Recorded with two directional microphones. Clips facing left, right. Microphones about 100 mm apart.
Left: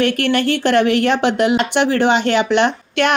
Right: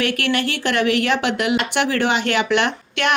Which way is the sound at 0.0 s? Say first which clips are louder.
Left 5 dB; 35° left (ahead or behind).